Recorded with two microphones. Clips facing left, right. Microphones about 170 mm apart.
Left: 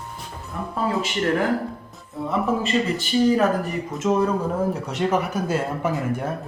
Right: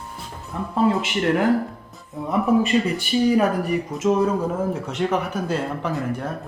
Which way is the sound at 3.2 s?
10° right (ahead or behind).